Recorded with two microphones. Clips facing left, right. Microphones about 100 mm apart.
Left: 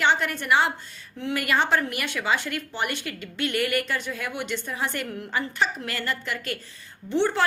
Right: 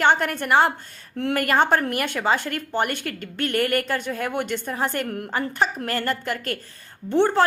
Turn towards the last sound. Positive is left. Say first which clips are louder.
# right 5 dB
turn(degrees=-45)  # may be behind; listen again after turning